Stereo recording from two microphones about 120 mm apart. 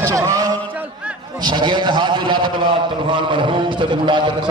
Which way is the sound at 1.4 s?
40° right (ahead or behind).